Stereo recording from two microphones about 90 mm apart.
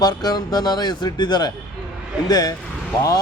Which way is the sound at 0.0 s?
50° left (ahead or behind).